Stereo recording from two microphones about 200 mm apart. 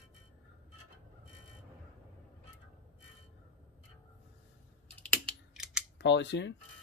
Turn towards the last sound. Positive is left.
turn(degrees=65)  # may be behind; listen again after turning